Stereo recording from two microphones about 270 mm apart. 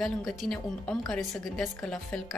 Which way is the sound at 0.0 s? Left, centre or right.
Centre.